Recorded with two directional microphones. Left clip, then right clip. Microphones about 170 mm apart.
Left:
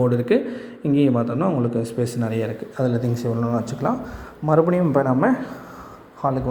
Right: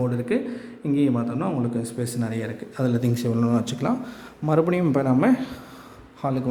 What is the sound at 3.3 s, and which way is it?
A man's voice, 30° right (ahead or behind).